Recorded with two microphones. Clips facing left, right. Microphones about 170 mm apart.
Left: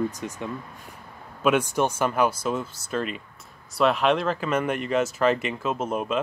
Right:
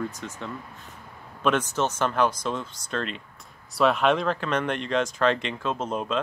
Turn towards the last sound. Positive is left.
turn(degrees=5)  # may be behind; listen again after turning